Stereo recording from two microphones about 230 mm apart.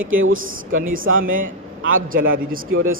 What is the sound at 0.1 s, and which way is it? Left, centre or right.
Speech, right.